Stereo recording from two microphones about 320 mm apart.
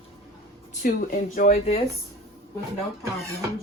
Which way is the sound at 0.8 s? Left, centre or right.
Left.